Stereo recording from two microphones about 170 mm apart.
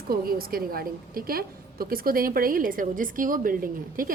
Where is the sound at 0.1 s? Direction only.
60° right (ahead or behind).